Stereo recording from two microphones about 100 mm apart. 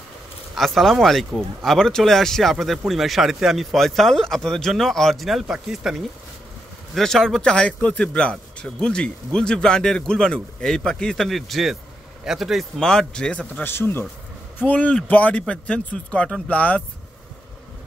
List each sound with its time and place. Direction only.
0.6 s a man's voice: centre (ahead or behind)
13.7 s a man's voice: 20° left (ahead or behind)